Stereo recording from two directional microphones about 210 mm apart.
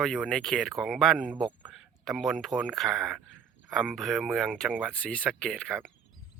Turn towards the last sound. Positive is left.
turn(degrees=5)  # may be behind; listen again after turning